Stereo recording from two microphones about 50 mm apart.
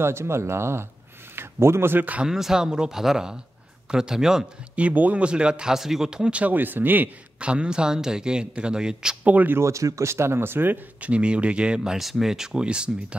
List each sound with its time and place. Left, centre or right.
0.0 s speech: right
2.2 s speech: centre
4.7 s speech: right; by 6.3 s centre
6.3 s speech: right
7.3 s speech: right
9.2 s speech: right
9.6 s speech: right
11.0 s speech: right